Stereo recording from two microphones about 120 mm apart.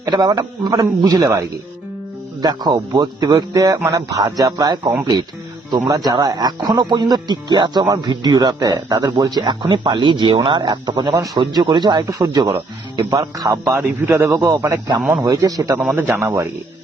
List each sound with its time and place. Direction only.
0.0 s a man's voice: 35° right (ahead or behind)
15.8 s a man's voice: 10° right (ahead or behind)